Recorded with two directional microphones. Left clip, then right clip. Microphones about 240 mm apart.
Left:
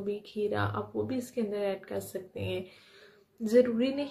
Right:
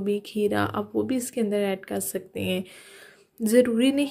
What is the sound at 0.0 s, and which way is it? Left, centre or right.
A woman's voice, right.